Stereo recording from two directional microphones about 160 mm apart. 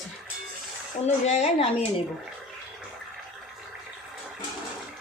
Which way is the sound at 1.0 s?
45° left (ahead or behind).